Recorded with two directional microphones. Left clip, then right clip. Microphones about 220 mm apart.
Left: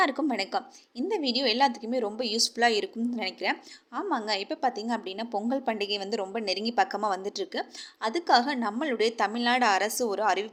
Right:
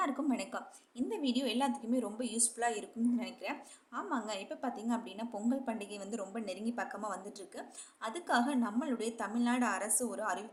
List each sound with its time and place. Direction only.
0.0 s a woman's voice: 30° left (ahead or behind)